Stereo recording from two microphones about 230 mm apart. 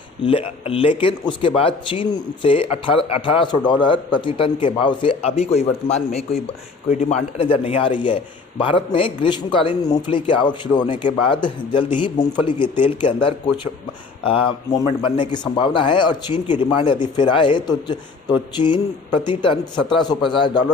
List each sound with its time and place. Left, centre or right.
0.3 s speech: left
14.3 s speech: left